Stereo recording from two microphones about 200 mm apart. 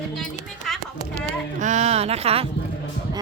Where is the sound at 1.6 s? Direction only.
35° right (ahead or behind).